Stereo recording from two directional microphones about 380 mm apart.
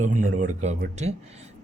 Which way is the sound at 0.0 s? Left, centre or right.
Right.